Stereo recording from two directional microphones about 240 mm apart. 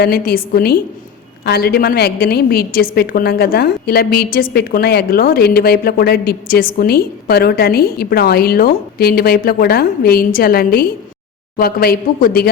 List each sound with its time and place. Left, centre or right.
0.0 s a woman's voice: left